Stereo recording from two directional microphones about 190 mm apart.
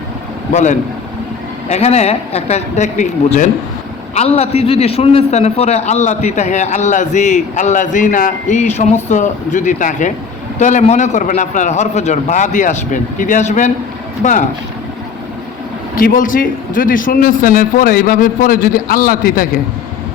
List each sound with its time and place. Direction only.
0.5 s a man's voice: 40° left (ahead or behind)
16.0 s a man's voice: 50° left (ahead or behind)